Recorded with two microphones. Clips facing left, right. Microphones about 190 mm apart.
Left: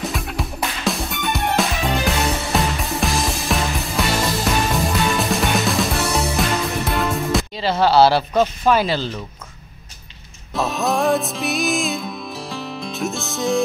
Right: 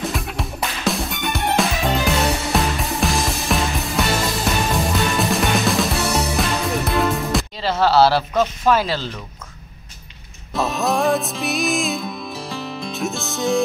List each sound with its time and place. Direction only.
0.0 s music: centre (ahead or behind)
8.3 s speech: 5° left (ahead or behind)
10.5 s music: centre (ahead or behind)